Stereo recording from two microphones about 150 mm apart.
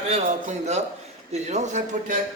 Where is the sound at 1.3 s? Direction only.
50° right (ahead or behind).